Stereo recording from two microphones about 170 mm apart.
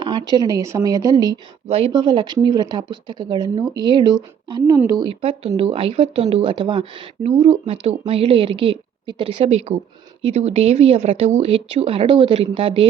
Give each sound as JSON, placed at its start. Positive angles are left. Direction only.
{"t": 0.0, "sound": "speech", "side_deg": -25}
{"t": 1.6, "sound": "speech", "side_deg": -35}